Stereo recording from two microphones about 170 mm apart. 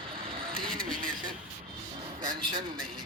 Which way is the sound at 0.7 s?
55° right (ahead or behind).